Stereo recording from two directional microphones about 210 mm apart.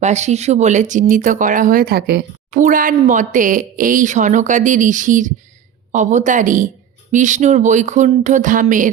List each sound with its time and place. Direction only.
0.0 s speech: 35° right (ahead or behind)